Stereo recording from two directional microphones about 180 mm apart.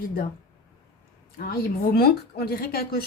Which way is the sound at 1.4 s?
55° left (ahead or behind).